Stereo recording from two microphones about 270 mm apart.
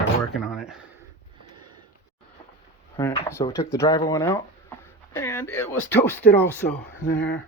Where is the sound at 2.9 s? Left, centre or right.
Centre.